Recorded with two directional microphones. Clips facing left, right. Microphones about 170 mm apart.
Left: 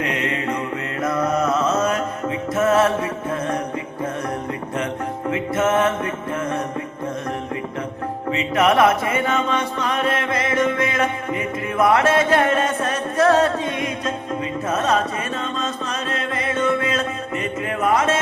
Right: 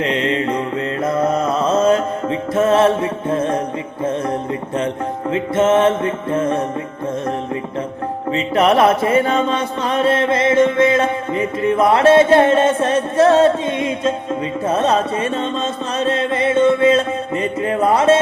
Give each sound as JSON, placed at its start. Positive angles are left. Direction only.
{"t": 0.0, "sound": "mantra", "side_deg": -25}
{"t": 2.6, "sound": "music", "side_deg": -25}
{"t": 5.3, "sound": "music", "side_deg": -25}
{"t": 8.3, "sound": "music", "side_deg": -30}